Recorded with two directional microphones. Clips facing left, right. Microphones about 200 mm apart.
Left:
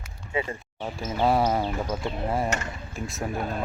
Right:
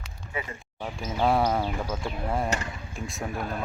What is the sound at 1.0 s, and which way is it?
Speech, 5° left (ahead or behind).